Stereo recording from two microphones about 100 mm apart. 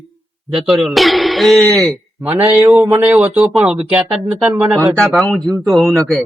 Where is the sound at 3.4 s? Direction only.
5° right (ahead or behind).